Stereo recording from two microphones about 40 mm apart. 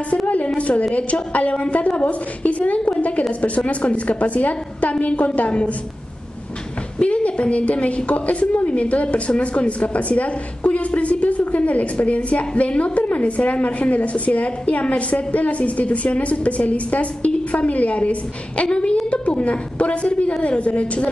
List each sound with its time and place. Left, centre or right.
0.6 s a woman's voice: left
7.0 s a woman's voice: left